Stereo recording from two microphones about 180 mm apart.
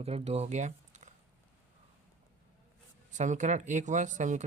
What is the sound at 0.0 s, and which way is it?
Speech, 35° right (ahead or behind).